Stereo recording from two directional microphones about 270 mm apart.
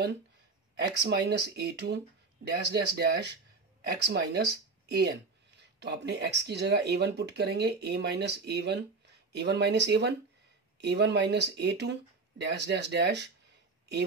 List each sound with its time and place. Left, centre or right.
0.7 s speech: right